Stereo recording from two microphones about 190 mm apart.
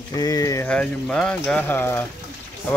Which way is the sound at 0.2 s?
20° left (ahead or behind).